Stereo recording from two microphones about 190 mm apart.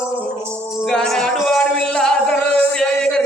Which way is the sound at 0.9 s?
5° left (ahead or behind).